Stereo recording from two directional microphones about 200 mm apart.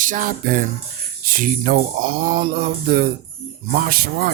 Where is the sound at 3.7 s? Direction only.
45° right (ahead or behind).